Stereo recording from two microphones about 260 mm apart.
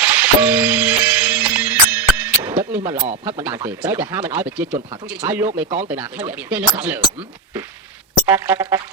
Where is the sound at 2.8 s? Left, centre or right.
Centre.